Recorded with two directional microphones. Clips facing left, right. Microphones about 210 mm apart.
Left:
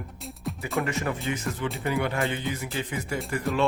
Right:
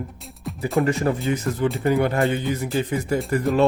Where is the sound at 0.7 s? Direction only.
35° right (ahead or behind).